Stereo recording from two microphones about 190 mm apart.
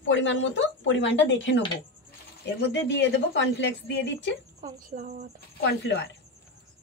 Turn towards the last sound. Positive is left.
turn(degrees=60)  # may be behind; listen again after turning